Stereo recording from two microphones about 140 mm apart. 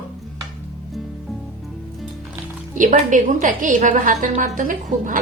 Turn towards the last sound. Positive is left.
turn(degrees=-70)  # may be behind; listen again after turning